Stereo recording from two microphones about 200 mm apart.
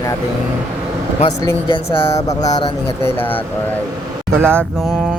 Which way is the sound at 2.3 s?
20° left (ahead or behind).